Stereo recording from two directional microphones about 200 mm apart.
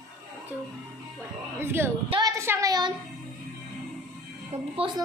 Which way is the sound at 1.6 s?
10° right (ahead or behind).